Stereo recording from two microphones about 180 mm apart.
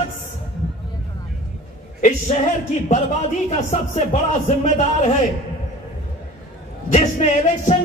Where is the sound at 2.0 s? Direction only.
45° left (ahead or behind).